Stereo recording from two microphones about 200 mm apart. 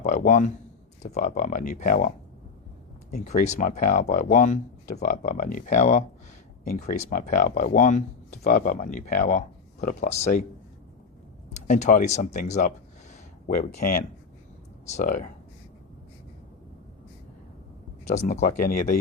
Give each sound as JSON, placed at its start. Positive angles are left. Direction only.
{"t": 0.0, "sound": "speech", "side_deg": 40}
{"t": 3.2, "sound": "speech", "side_deg": 35}
{"t": 11.5, "sound": "speech", "side_deg": 35}
{"t": 18.1, "sound": "speech", "side_deg": 35}